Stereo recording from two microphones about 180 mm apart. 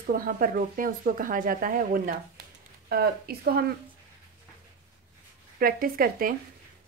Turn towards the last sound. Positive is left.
turn(degrees=-55)  # may be behind; listen again after turning